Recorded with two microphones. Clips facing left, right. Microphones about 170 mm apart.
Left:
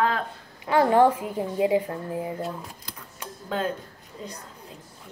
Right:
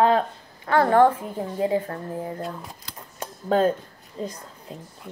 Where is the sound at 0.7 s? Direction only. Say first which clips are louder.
Right 1 dB; 15° left (ahead or behind).